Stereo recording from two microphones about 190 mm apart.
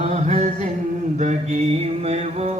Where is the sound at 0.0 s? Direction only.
35° right (ahead or behind).